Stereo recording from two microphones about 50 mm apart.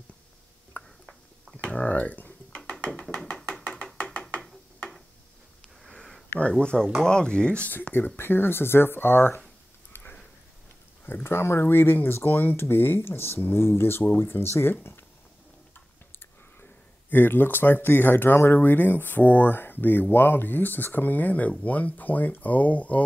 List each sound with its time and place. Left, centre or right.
0.8 s a sound: left
1.7 s speech: left
5.9 s sniff: centre
6.6 s speech: left
7.9 s speech: left
11.2 s speech: left
17.1 s speech: left